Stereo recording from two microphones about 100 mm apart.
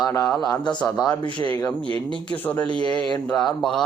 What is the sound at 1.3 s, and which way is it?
Speech, 60° right (ahead or behind).